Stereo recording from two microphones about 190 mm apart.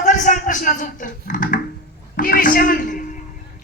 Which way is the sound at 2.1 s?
45° left (ahead or behind).